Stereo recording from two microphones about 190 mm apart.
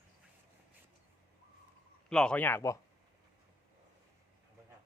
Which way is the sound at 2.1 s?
5° left (ahead or behind).